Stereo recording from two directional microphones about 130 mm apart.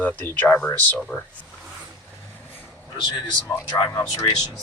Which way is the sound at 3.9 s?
20° left (ahead or behind).